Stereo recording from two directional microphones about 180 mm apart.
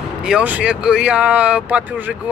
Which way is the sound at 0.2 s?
5° right (ahead or behind).